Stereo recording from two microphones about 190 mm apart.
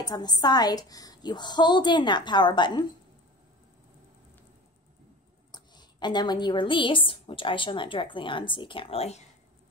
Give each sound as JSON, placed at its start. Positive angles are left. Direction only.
{"t": 0.0, "sound": "a woman's voice", "side_deg": 20}
{"t": 5.5, "sound": "a woman's voice", "side_deg": 20}